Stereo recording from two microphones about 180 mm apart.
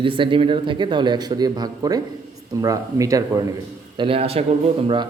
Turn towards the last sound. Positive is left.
turn(degrees=-30)  # may be behind; listen again after turning